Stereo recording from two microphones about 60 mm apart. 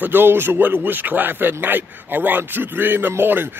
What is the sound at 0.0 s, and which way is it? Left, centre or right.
Speech, right.